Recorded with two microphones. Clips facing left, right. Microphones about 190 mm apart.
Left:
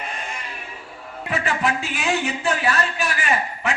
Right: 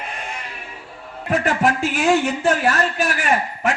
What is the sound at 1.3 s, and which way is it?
A man's voice, 45° right (ahead or behind).